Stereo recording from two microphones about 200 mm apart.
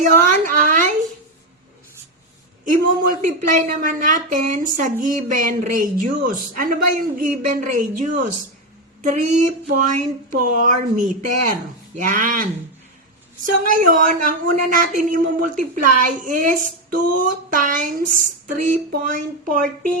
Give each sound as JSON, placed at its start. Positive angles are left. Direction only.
{"t": 0.0, "sound": "speech", "side_deg": -40}
{"t": 2.6, "sound": "speech", "side_deg": -40}